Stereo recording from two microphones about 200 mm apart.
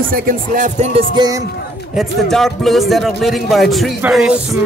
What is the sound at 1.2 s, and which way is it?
Speech, 15° right (ahead or behind).